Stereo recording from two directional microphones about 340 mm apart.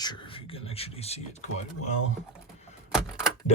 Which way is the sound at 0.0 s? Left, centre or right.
Centre.